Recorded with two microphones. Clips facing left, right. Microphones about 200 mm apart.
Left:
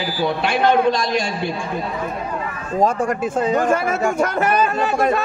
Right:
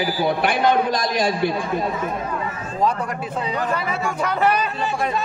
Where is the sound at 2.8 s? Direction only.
45° left (ahead or behind).